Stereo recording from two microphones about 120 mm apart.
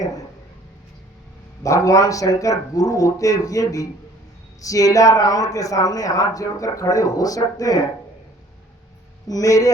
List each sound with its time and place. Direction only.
1.6 s a man's voice: 25° left (ahead or behind)
9.2 s a man's voice: 30° left (ahead or behind)